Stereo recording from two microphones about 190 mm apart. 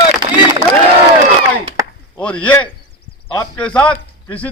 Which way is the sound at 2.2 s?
5° left (ahead or behind).